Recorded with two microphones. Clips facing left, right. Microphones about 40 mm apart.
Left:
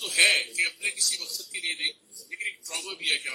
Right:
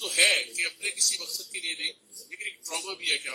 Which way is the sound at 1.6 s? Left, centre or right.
Left.